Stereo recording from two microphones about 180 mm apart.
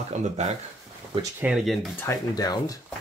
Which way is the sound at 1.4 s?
5° right (ahead or behind).